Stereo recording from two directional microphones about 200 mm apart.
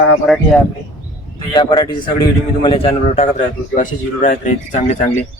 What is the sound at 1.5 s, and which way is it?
A man's voice, 20° left (ahead or behind).